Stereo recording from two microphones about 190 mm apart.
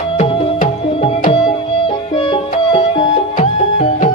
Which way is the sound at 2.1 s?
25° left (ahead or behind).